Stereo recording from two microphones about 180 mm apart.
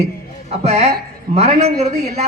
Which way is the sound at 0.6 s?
35° right (ahead or behind).